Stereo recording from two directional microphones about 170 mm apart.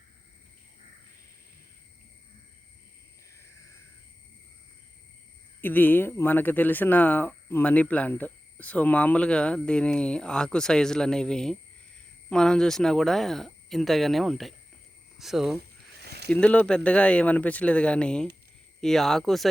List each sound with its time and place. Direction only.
5.6 s speech: 10° left (ahead or behind)
16.0 s snake: 75° right (ahead or behind)
16.3 s speech: 10° left (ahead or behind)